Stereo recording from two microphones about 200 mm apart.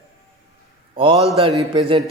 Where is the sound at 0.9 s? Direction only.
25° right (ahead or behind).